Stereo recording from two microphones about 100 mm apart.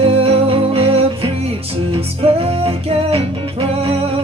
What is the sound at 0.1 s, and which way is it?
Music, 75° right (ahead or behind).